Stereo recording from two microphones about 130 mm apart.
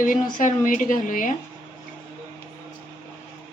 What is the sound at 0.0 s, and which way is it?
A woman's voice, 90° left.